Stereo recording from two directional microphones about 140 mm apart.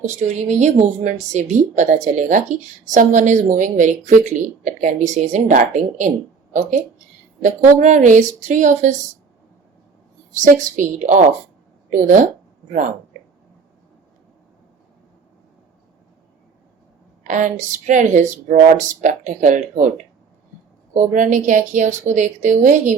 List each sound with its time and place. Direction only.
0.0 s speech: 55° right (ahead or behind)
10.4 s a woman's voice: 65° right (ahead or behind)
17.2 s speech: 65° right (ahead or behind)
20.9 s speech: 65° right (ahead or behind)